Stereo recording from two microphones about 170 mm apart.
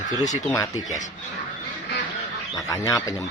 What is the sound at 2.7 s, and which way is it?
Speech, 20° left (ahead or behind).